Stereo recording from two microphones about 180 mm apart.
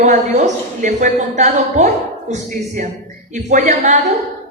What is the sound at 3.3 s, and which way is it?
Speech, 40° right (ahead or behind).